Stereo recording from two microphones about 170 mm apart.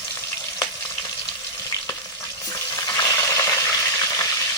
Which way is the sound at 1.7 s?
20° left (ahead or behind).